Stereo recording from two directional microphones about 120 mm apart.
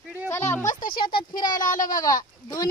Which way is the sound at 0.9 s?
45° left (ahead or behind).